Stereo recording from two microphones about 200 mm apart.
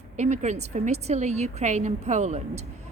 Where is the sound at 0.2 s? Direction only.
35° right (ahead or behind).